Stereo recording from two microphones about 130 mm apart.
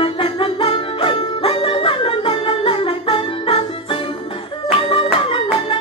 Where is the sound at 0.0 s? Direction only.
45° left (ahead or behind).